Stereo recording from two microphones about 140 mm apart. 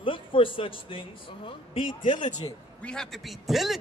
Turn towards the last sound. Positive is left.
turn(degrees=0)  # may be behind; listen again after turning